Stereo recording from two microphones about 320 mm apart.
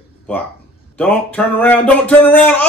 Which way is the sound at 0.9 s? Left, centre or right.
Centre.